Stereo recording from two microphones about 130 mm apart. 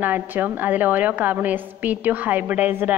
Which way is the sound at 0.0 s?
15° right (ahead or behind).